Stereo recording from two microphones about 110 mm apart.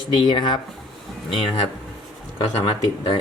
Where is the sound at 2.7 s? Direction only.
50° left (ahead or behind).